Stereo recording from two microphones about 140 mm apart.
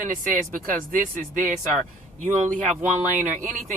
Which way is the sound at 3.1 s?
65° right (ahead or behind).